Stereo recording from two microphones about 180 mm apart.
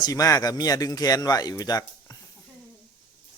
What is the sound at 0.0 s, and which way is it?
Speech, 20° left (ahead or behind).